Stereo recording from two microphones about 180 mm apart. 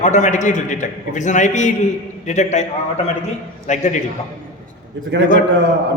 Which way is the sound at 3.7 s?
40° left (ahead or behind).